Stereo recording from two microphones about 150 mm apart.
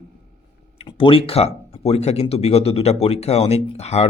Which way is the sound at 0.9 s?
35° left (ahead or behind).